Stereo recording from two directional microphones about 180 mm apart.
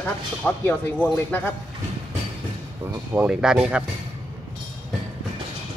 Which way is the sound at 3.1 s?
5° right (ahead or behind).